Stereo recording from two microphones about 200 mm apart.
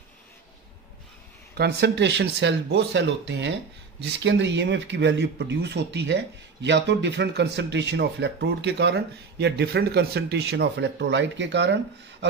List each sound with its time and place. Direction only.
1.6 s speech: 55° right (ahead or behind)